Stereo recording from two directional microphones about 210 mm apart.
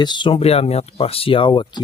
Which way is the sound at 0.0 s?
20° left (ahead or behind).